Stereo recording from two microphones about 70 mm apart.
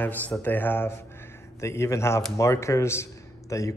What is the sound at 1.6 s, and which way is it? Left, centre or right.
A man's voice, left.